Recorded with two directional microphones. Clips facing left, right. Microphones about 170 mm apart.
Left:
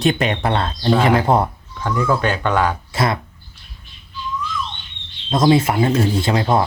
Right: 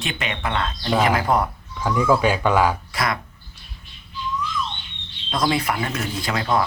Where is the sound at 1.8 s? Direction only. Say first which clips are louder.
Right 1 dB; 10° right (ahead or behind).